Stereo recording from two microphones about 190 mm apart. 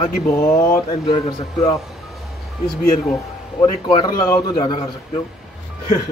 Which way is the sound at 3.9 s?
15° left (ahead or behind).